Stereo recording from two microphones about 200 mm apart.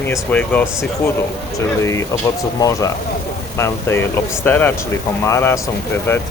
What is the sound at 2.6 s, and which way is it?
Speech, 15° left (ahead or behind).